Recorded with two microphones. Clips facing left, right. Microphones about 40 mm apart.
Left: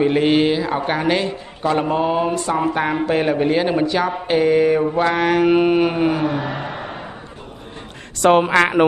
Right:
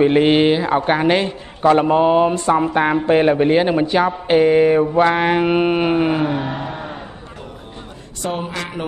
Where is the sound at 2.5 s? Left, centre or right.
Centre.